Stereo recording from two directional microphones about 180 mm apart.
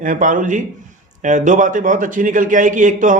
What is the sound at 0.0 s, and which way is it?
A man's voice, 45° right (ahead or behind).